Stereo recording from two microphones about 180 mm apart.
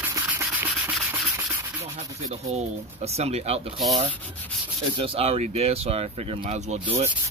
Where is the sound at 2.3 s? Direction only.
35° right (ahead or behind).